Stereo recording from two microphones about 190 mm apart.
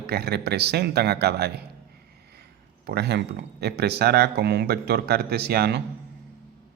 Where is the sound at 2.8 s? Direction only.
60° right (ahead or behind).